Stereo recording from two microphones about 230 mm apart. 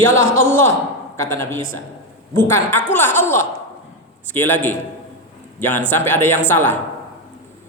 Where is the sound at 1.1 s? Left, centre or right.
Centre.